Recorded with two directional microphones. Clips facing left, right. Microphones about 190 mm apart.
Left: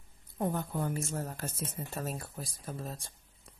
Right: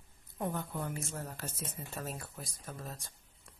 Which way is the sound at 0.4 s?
35° left (ahead or behind).